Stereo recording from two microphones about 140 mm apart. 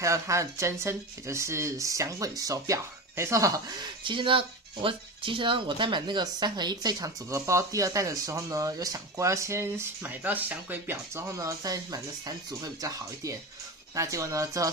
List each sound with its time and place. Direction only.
0.0 s speech: 20° right (ahead or behind)